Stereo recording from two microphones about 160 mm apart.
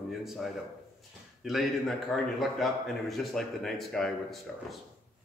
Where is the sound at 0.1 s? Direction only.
Centre (ahead or behind).